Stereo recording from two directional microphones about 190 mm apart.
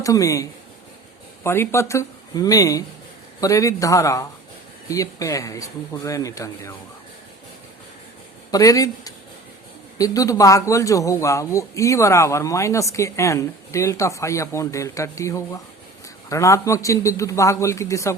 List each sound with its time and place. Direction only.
0.0 s speech: 15° left (ahead or behind)
1.5 s speech: 15° left (ahead or behind)
8.4 s speech: 20° left (ahead or behind)